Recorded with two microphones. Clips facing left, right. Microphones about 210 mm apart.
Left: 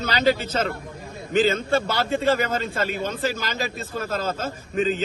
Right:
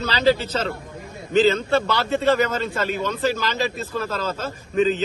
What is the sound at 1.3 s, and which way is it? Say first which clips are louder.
A man's voice: right 3 dB; 45° left (ahead or behind).